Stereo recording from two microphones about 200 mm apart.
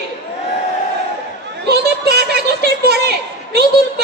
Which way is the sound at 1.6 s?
55° right (ahead or behind).